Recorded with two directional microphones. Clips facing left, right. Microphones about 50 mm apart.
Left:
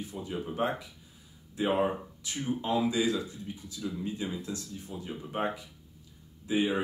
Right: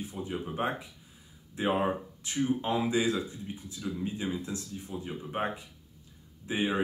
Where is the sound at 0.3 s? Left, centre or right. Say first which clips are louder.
Left 1 dB; right.